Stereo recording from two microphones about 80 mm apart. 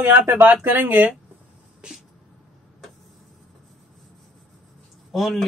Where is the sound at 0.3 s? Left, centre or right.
Right.